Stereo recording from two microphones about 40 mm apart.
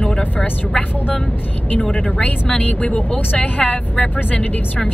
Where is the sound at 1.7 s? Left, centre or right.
Left.